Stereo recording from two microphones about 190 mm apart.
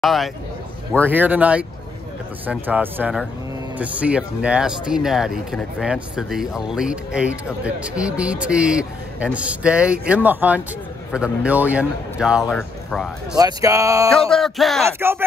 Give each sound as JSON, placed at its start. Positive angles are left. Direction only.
{"t": 0.0, "sound": "speech", "side_deg": 0}
{"t": 13.4, "sound": "speech", "side_deg": -20}
{"t": 14.1, "sound": "speech", "side_deg": 0}
{"t": 14.9, "sound": "speech", "side_deg": -10}